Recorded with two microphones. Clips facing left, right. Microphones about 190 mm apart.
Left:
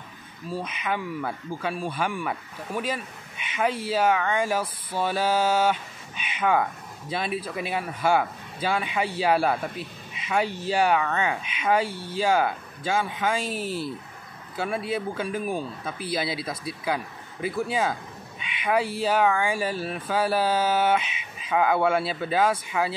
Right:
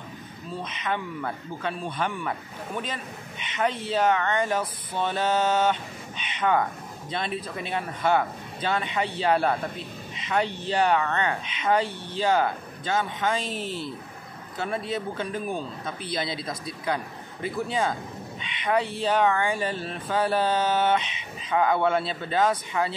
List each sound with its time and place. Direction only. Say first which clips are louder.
0.5 s speech: left 1 dB; 10° left (ahead or behind)
14.9 s speech: left 2 dB; 10° left (ahead or behind)